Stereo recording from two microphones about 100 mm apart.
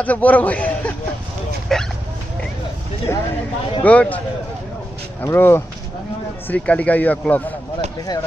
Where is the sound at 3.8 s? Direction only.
15° left (ahead or behind).